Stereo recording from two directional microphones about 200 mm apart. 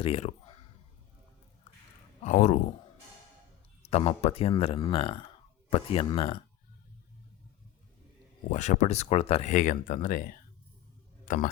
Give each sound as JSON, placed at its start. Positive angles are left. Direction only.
{"t": 0.0, "sound": "a sound", "side_deg": 30}
{"t": 2.2, "sound": "speech", "side_deg": 35}
{"t": 3.8, "sound": "speech", "side_deg": 30}
{"t": 8.4, "sound": "speech", "side_deg": 35}